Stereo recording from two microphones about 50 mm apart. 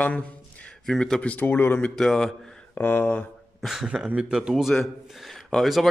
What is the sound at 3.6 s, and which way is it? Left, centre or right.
A man's voice, centre.